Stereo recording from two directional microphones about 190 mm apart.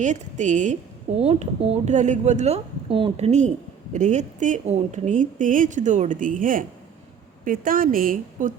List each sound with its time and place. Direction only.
0.0 s a woman's voice: 40° right (ahead or behind)